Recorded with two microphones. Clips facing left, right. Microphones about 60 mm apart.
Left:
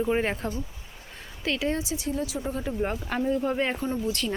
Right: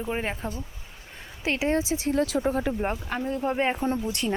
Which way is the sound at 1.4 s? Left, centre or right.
Right.